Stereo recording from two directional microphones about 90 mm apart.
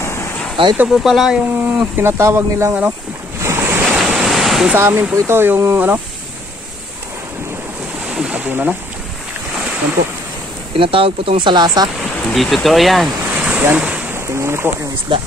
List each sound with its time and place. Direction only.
0.0 s a sound: 30° left (ahead or behind)
0.6 s speech: 75° right (ahead or behind)
0.9 s speech: centre (ahead or behind)
2.0 s speech: 30° right (ahead or behind)
3.3 s waves: 35° right (ahead or behind)
3.9 s waves: 10° right (ahead or behind)
4.7 s speech: 25° right (ahead or behind)
8.1 s speech: 10° right (ahead or behind)
10.8 s speech: 85° right; by 11.9 s 50° right (ahead or behind)
12.4 s speech: centre (ahead or behind)
13.3 s a sound: 15° right (ahead or behind)
14.2 s speech: 30° right (ahead or behind)
15.1 s speech: 65° right (ahead or behind)